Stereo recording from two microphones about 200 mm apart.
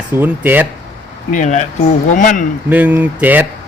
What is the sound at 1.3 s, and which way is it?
Speech, 35° left (ahead or behind).